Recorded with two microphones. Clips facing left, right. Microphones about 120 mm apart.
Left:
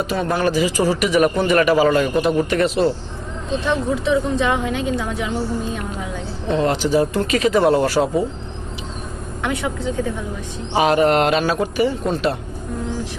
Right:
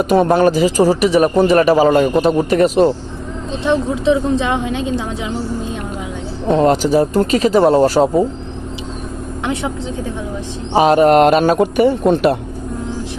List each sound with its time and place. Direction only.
0.0 s a man's voice: 50° right (ahead or behind)
3.6 s a woman's voice: 20° right (ahead or behind)
6.5 s a man's voice: 40° right (ahead or behind)
9.4 s a woman's voice: 25° right (ahead or behind)
10.8 s speech: 40° right (ahead or behind); by 12.4 s 65° right (ahead or behind)